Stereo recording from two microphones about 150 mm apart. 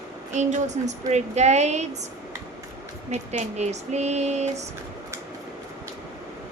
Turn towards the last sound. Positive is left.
turn(degrees=-50)  # may be behind; listen again after turning